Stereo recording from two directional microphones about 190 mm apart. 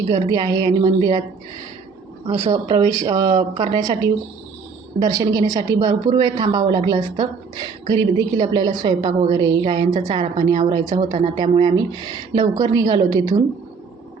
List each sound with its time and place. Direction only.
0.1 s a woman's voice: 20° right (ahead or behind)
2.4 s speech: 35° right (ahead or behind)
2.7 s a woman's voice: 20° right (ahead or behind)